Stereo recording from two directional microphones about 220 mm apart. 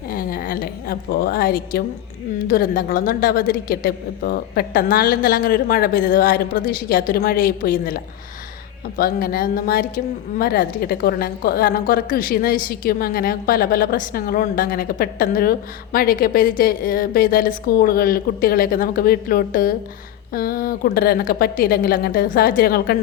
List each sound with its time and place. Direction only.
0.1 s a woman's voice: 40° left (ahead or behind)